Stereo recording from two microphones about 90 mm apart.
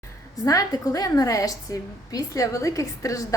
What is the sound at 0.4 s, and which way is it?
A woman's voice, 40° left (ahead or behind).